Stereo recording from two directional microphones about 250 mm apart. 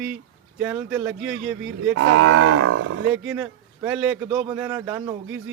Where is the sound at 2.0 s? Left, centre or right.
Right.